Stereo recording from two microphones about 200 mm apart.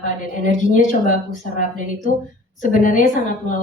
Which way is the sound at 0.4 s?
40° left (ahead or behind).